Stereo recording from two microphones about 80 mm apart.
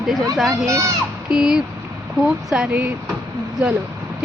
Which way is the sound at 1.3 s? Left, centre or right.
Centre.